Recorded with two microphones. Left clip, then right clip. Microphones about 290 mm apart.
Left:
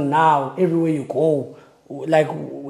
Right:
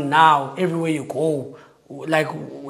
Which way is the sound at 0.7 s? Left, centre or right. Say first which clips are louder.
Left 3 dB; right.